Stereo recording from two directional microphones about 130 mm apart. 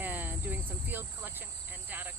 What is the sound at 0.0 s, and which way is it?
Cricket, 15° right (ahead or behind).